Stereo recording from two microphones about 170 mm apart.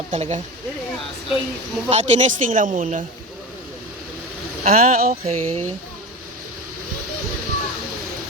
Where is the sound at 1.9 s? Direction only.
45° right (ahead or behind).